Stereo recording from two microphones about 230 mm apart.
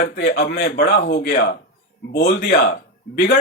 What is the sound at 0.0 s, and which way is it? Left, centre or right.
Speech, left.